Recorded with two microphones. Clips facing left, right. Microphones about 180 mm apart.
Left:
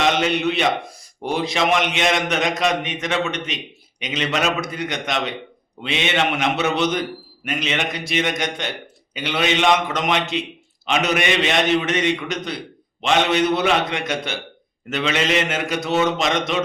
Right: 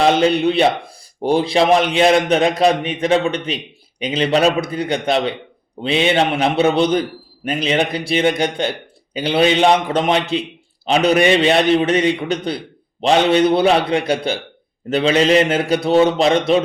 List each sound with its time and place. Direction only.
0.0 s a man's voice: 35° right (ahead or behind)